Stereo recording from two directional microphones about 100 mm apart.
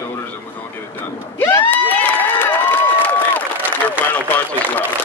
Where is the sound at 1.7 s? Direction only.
15° left (ahead or behind).